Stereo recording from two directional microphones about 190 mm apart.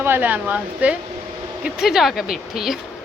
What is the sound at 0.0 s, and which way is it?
Speech, 10° right (ahead or behind).